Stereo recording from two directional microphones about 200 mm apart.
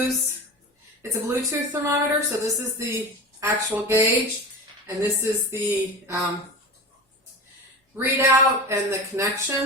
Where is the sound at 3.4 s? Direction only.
10° right (ahead or behind).